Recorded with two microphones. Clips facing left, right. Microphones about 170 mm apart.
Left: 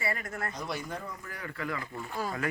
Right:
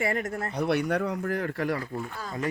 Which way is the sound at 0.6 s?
65° right (ahead or behind).